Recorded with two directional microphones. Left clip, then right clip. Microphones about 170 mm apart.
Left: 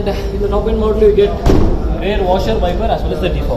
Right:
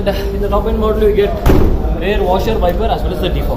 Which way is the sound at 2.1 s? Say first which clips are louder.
Even; 25° left (ahead or behind).